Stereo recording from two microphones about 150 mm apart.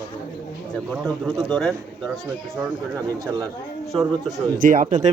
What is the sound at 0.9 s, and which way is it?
Speech, 5° left (ahead or behind).